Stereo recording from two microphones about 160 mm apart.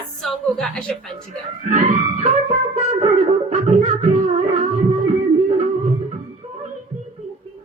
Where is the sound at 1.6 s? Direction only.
55° right (ahead or behind).